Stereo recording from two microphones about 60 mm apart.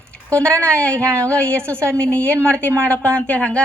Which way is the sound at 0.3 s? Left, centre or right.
Left.